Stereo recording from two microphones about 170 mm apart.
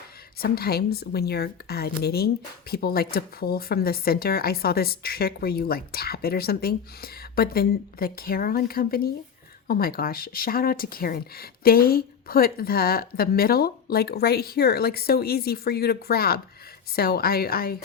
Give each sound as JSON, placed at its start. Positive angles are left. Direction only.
{"t": 0.3, "sound": "a woman's voice", "side_deg": 65}